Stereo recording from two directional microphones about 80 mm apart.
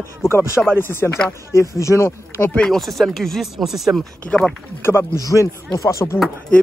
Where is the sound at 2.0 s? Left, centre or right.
Left; by 4.0 s centre.